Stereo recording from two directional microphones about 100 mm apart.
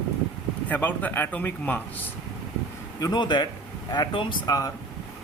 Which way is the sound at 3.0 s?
45° left (ahead or behind).